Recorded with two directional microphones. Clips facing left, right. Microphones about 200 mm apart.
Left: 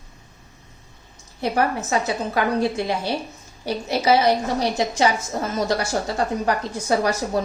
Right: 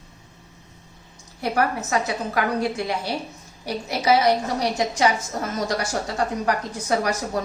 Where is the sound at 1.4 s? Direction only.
25° left (ahead or behind).